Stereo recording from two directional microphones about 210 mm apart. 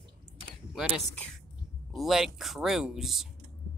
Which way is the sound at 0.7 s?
Centre (ahead or behind).